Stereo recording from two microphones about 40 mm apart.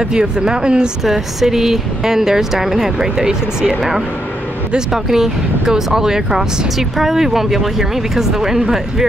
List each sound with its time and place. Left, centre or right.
0.0 s speech: centre
1.0 s speech: centre